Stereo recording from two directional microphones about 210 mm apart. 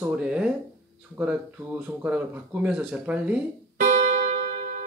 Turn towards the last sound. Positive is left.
turn(degrees=-40)  # may be behind; listen again after turning